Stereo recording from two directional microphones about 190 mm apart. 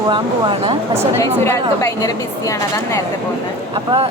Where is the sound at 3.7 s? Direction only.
30° right (ahead or behind).